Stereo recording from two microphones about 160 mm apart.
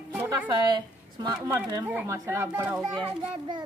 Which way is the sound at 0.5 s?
30° right (ahead or behind).